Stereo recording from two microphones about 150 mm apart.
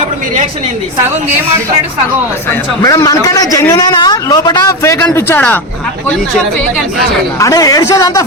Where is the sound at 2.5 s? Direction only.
20° left (ahead or behind).